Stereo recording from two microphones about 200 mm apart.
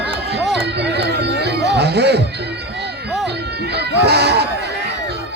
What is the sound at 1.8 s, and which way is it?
Music, 55° right (ahead or behind).